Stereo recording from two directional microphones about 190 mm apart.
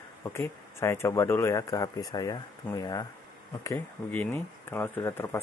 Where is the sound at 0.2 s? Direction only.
15° left (ahead or behind).